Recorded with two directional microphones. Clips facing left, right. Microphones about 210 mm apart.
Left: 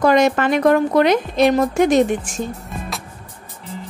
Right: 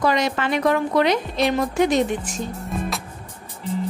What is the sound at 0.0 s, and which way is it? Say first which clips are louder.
A woman's voice: left 6 dB; 50° left (ahead or behind).